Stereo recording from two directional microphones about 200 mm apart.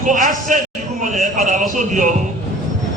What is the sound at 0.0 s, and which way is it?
A woman's voice, 40° right (ahead or behind).